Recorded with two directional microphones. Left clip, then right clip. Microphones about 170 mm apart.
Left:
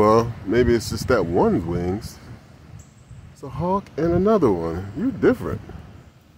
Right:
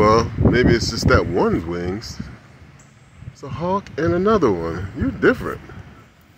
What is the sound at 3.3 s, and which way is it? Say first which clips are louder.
Speech: right 1 dB; 20° left (ahead or behind).